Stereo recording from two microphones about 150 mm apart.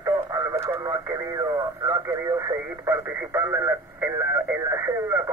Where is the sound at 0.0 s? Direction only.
20° right (ahead or behind).